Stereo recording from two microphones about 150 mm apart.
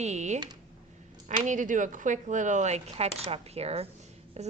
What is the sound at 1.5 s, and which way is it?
A woman's voice, 60° right (ahead or behind).